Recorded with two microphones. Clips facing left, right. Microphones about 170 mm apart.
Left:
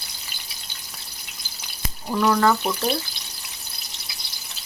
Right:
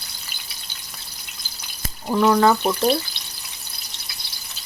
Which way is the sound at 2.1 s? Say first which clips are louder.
Right 3 dB; 25° right (ahead or behind).